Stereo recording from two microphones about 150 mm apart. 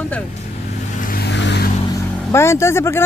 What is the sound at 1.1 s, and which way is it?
Vehicle, 85° left.